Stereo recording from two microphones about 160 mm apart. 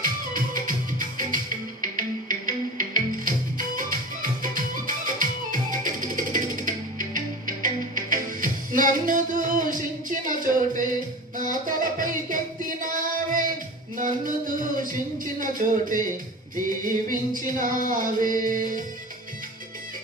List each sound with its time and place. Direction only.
0.0 s music: 60° right (ahead or behind)